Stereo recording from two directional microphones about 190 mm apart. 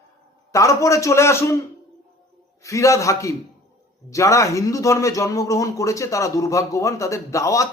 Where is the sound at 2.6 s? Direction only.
15° left (ahead or behind).